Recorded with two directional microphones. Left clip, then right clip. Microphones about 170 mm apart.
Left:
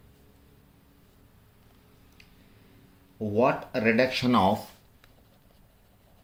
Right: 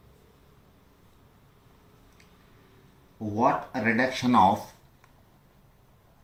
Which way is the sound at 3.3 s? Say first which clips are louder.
Even; 50° left (ahead or behind).